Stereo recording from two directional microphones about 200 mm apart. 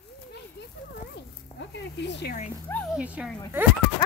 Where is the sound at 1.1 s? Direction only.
60° left (ahead or behind).